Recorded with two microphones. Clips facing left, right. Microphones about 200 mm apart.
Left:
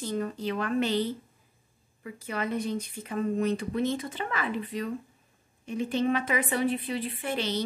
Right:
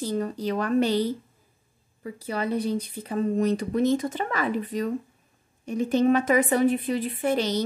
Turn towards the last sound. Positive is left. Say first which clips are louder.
# right 6 dB
turn(degrees=-40)  # may be behind; listen again after turning